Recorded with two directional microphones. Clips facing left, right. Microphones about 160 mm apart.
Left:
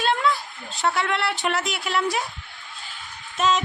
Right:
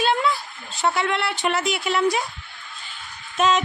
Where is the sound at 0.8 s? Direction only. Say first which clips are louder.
Right 1 dB; centre (ahead or behind).